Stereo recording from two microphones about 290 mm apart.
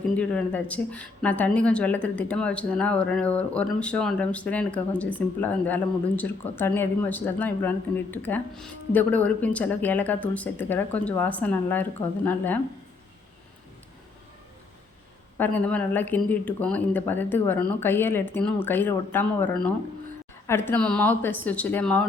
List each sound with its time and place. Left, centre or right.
0.2 s a woman's voice: centre
15.4 s a woman's voice: centre